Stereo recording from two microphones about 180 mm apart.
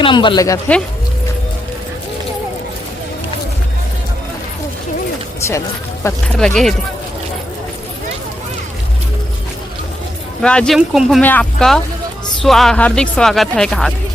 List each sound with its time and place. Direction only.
0.0 s speech: 25° left (ahead or behind)
5.4 s speech: 15° left (ahead or behind)
6.2 s speech: 5° left (ahead or behind)
10.4 s speech: 5° left (ahead or behind)
11.2 s speech: 10° left (ahead or behind)